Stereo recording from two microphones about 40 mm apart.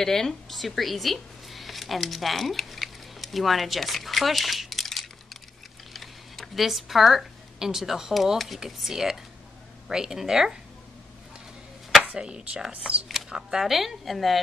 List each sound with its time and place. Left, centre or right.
0.0 s speech: centre
5.9 s a sound: centre
7.5 s speech: centre
12.1 s speech: centre